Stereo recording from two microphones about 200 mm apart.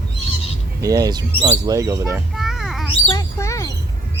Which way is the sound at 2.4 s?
Centre (ahead or behind).